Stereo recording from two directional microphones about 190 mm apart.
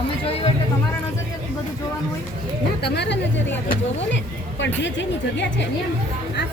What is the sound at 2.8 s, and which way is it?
Speech, 60° left (ahead or behind).